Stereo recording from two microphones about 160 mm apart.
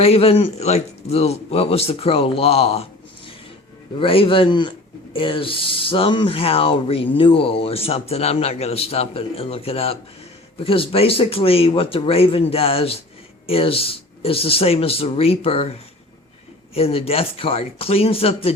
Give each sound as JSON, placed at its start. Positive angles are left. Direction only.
{"t": 0.0, "sound": "a man's voice", "side_deg": 40}
{"t": 3.9, "sound": "a man's voice", "side_deg": 35}
{"t": 16.7, "sound": "a man's voice", "side_deg": 40}